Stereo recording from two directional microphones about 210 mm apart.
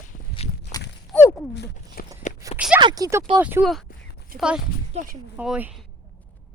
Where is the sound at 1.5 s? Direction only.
55° left (ahead or behind).